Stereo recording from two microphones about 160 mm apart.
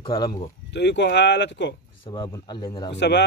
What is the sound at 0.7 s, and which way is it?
A man's voice, 90° left.